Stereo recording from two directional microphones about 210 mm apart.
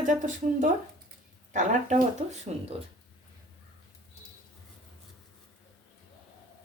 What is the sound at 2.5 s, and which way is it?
Speech, 30° right (ahead or behind).